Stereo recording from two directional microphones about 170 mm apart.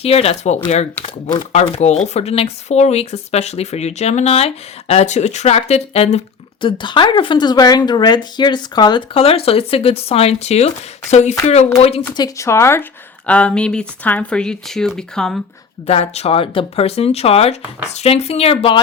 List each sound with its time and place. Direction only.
0.0 s speech: 35° left (ahead or behind)
12.1 s speech: 20° left (ahead or behind); by 15.4 s 5° left (ahead or behind)
15.9 s speech: 40° left (ahead or behind)